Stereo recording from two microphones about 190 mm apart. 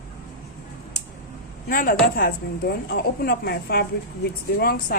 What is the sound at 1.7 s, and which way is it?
Speech, 50° left (ahead or behind).